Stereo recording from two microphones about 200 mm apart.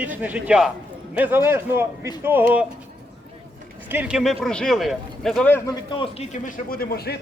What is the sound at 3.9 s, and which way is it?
A man's voice, 5° right (ahead or behind).